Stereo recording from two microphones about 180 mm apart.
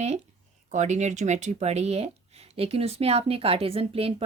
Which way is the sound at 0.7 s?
40° right (ahead or behind).